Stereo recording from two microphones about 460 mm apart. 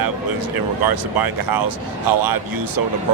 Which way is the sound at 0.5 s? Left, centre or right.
Right.